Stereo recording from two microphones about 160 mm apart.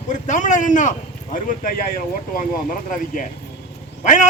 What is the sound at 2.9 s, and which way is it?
A man's voice, 55° left (ahead or behind).